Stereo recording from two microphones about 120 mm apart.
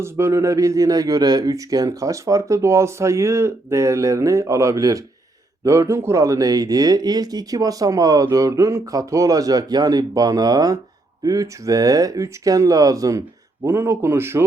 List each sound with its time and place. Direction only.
0.0 s speech: 20° right (ahead or behind)